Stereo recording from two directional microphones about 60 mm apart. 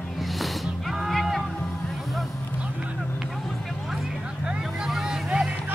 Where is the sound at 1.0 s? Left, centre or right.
Centre.